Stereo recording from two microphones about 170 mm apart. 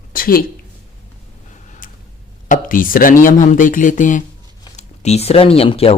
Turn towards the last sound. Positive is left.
turn(degrees=35)  # may be behind; listen again after turning